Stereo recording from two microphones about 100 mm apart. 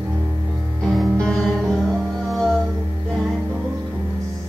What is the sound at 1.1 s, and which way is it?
Music, 5° left (ahead or behind).